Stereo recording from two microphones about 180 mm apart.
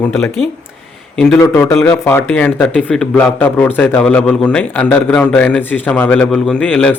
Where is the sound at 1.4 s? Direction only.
15° left (ahead or behind).